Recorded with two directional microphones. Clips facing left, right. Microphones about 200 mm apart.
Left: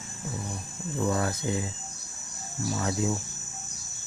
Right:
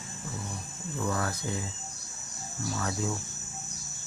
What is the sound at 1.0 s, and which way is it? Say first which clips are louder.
Speech: left 4 dB; 25° left (ahead or behind).